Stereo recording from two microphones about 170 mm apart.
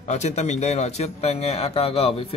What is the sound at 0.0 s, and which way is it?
A man's voice, 40° left (ahead or behind).